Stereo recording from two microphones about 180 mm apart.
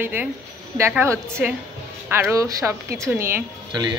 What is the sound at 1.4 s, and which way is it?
A woman's voice, 5° right (ahead or behind).